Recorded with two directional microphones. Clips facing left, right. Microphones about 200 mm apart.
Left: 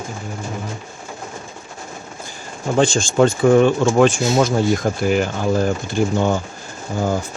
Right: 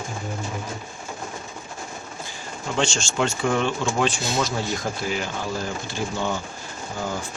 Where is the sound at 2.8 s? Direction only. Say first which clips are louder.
Left 9 dB; 45° left (ahead or behind).